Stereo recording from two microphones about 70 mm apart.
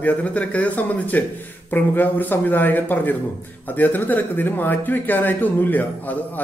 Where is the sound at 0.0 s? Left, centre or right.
Left.